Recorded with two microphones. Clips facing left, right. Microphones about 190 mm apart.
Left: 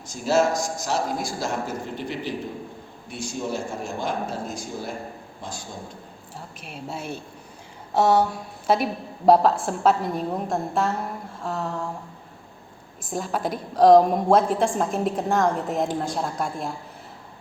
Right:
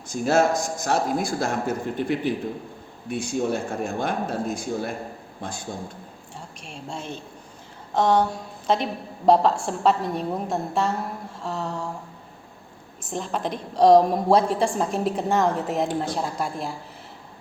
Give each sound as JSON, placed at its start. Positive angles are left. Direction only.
{"t": 0.1, "sound": "a man's voice", "side_deg": -55}
{"t": 6.6, "sound": "a woman's voice", "side_deg": 5}
{"t": 13.1, "sound": "a woman's voice", "side_deg": 5}